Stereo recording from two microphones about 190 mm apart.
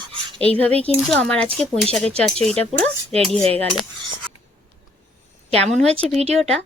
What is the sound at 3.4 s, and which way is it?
Speech, 30° right (ahead or behind).